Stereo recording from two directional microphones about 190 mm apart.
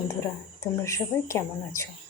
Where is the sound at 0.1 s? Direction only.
15° left (ahead or behind).